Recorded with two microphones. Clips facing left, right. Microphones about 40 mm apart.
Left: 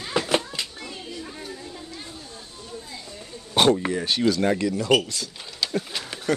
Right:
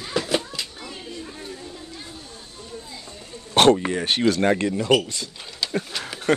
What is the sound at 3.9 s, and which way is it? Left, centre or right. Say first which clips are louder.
Speech: right 1 dB; right.